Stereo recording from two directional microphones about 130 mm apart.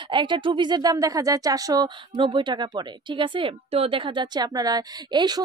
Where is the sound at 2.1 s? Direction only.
40° right (ahead or behind).